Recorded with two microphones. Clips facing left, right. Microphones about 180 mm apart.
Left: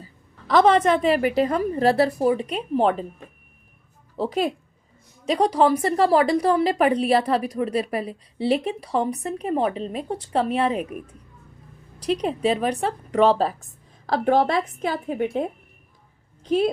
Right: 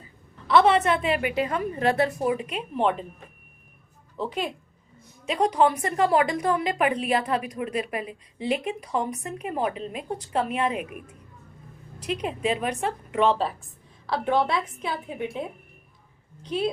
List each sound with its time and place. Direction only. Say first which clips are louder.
0.0 s a woman's voice: left 2 dB; 40° left (ahead or behind)
4.2 s a woman's voice: left 6 dB; 35° left (ahead or behind)
12.0 s a woman's voice: left 5 dB; 35° left (ahead or behind)